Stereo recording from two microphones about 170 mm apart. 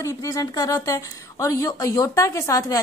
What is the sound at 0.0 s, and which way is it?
Speech, 20° left (ahead or behind).